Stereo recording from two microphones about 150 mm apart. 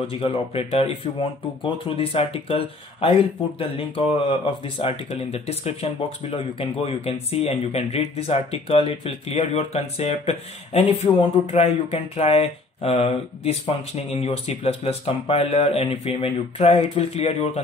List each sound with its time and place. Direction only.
0.0 s speech: 40° left (ahead or behind)